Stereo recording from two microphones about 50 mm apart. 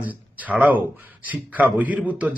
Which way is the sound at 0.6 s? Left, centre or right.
Right.